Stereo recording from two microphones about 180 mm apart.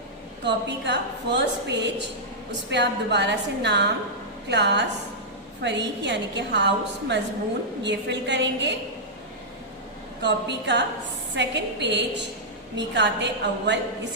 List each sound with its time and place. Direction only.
0.4 s a woman's voice: 70° right (ahead or behind)
10.2 s a woman's voice: 75° right (ahead or behind)